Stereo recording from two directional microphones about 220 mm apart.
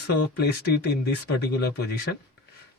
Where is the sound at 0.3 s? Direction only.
45° left (ahead or behind).